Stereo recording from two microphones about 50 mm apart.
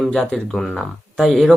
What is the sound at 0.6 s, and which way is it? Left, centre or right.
Speech, centre.